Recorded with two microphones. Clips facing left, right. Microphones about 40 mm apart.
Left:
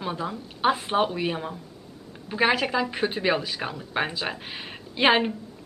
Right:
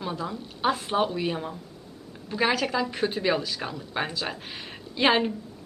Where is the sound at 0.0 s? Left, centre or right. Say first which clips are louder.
Left 1 dB; left.